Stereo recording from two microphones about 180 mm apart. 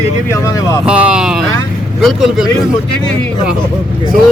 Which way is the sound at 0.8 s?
5° right (ahead or behind).